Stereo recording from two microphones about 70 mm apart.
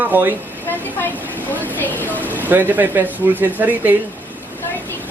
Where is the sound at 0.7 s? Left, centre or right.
Left.